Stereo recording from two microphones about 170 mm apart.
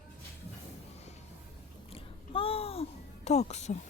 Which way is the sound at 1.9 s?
35° left (ahead or behind).